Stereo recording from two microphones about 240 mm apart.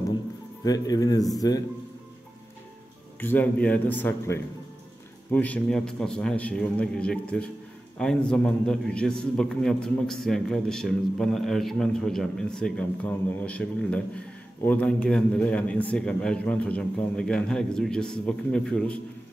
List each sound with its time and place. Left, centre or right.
0.7 s speech: centre
3.2 s a man's voice: centre